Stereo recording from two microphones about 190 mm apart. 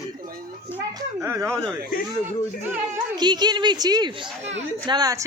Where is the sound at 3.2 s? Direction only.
20° right (ahead or behind).